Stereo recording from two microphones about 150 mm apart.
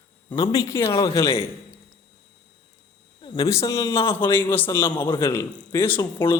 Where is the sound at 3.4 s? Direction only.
20° left (ahead or behind).